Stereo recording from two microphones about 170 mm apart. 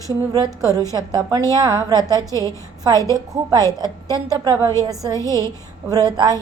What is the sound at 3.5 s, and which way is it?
A woman's voice, 25° right (ahead or behind).